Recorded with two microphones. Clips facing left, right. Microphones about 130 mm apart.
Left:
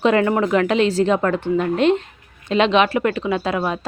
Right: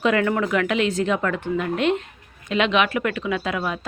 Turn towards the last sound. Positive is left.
turn(degrees=35)  # may be behind; listen again after turning